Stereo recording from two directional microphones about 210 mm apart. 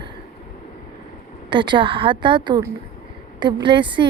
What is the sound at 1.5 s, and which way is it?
Speech, 25° right (ahead or behind).